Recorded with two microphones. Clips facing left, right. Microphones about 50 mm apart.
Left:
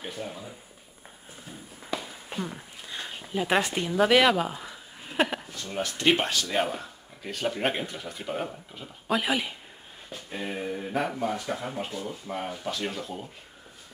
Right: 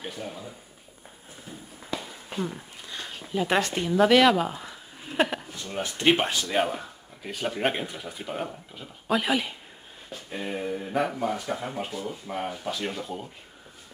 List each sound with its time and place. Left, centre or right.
0.0 s speech: centre
1.9 s a sound: centre
5.8 s speech: right; by 13.3 s centre